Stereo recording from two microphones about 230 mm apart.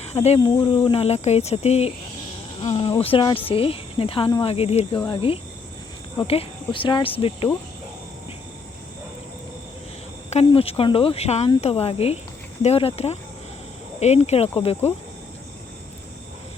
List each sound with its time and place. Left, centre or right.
0.0 s speech: left
10.2 s speech: left